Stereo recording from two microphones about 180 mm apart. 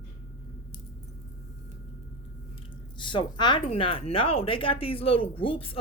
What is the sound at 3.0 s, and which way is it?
Speech, 25° left (ahead or behind).